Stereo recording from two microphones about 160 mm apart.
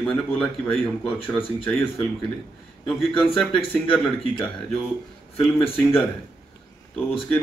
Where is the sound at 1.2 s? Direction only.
35° left (ahead or behind).